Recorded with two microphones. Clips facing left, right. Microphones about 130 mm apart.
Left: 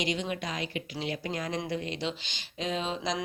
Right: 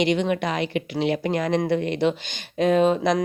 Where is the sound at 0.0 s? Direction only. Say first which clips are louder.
Right 10 dB; 65° right (ahead or behind).